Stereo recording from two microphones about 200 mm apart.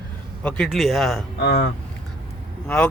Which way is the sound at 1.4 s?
60° left (ahead or behind).